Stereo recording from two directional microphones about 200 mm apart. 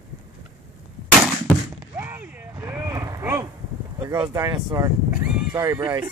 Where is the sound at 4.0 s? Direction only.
20° right (ahead or behind).